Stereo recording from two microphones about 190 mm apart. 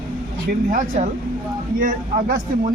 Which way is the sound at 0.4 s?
45° right (ahead or behind).